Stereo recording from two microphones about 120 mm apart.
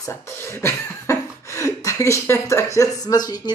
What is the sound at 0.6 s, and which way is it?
Speech, 25° left (ahead or behind).